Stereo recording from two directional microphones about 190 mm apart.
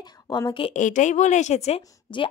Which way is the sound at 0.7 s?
40° left (ahead or behind).